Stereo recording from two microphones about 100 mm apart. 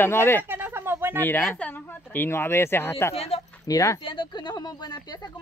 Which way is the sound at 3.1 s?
80° left.